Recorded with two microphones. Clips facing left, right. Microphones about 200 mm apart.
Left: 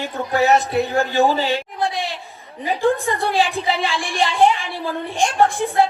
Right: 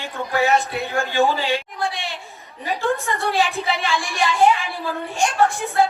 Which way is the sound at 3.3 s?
35° left (ahead or behind).